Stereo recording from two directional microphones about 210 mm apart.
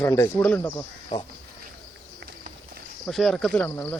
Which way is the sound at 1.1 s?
20° left (ahead or behind).